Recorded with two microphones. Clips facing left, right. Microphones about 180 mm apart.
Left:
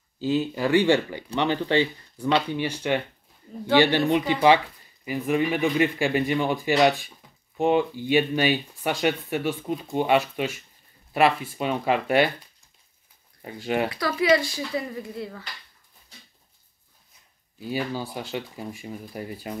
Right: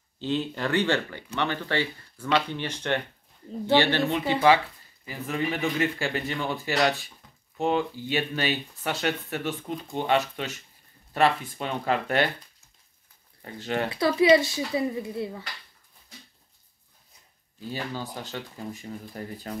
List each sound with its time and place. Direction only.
0.2 s speech: 5° left (ahead or behind)
13.4 s speech: 15° left (ahead or behind)
13.8 s speech: 25° right (ahead or behind)
17.6 s speech: 10° left (ahead or behind)